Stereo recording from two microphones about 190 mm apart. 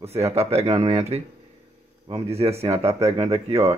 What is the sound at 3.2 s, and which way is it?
Speech, 35° right (ahead or behind).